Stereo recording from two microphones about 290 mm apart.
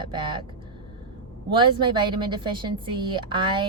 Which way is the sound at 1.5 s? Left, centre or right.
Centre.